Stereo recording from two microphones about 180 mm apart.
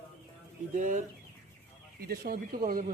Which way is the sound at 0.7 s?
45° right (ahead or behind).